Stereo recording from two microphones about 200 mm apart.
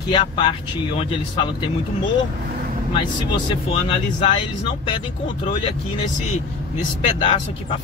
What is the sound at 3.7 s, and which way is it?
Speech, 30° left (ahead or behind).